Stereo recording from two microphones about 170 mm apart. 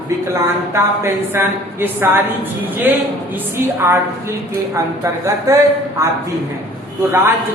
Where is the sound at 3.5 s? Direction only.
15° right (ahead or behind).